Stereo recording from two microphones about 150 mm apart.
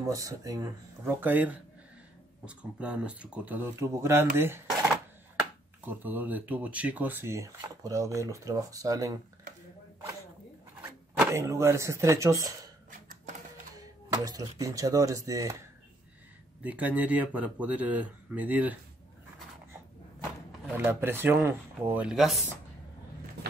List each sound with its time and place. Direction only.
0.0 s speech: 20° right (ahead or behind)
1.2 s speech: 10° right (ahead or behind)
5.9 s speech: 10° right (ahead or behind)
11.3 s speech: 20° right (ahead or behind)
13.7 s speech: 25° right (ahead or behind)
16.6 s speech: 10° right (ahead or behind)
20.7 s speech: 15° right (ahead or behind)